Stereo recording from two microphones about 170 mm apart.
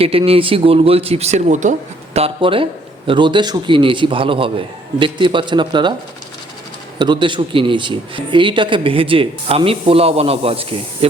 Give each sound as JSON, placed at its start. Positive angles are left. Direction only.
{"t": 0.0, "sound": "speech", "side_deg": -35}
{"t": 2.1, "sound": "a man's voice", "side_deg": -35}
{"t": 7.0, "sound": "speech", "side_deg": -30}